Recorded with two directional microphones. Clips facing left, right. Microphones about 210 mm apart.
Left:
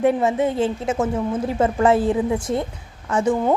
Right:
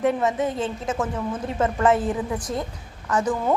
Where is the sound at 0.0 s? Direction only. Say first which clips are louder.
Left 4 dB; 30° left (ahead or behind).